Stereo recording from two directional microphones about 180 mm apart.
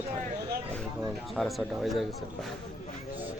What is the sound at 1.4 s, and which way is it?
Speech, centre (ahead or behind).